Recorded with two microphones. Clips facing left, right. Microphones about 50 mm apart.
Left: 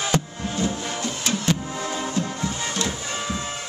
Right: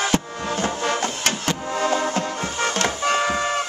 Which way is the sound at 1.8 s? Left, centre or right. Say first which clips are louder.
Right 5 dB; right.